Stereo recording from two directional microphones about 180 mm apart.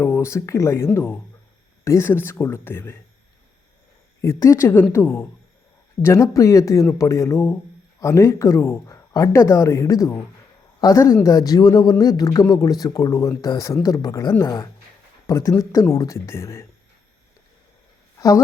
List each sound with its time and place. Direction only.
0.0 s speech: 15° left (ahead or behind)
4.2 s speech: 15° left (ahead or behind)
18.2 s speech: 20° left (ahead or behind)